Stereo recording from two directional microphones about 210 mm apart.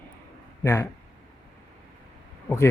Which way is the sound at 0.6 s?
15° left (ahead or behind).